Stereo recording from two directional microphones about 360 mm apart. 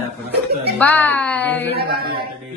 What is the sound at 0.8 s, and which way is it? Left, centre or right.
Speech, centre.